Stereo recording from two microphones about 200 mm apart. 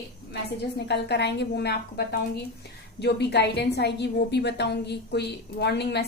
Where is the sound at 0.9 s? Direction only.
55° left (ahead or behind).